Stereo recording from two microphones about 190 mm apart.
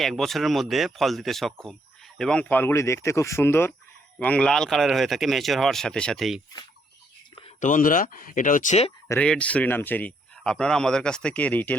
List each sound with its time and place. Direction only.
0.0 s speech: centre (ahead or behind)
7.6 s speech: 45° left (ahead or behind)
9.0 s speech: 5° left (ahead or behind)